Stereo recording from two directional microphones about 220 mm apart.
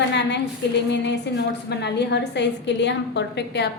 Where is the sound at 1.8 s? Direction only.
50° left (ahead or behind).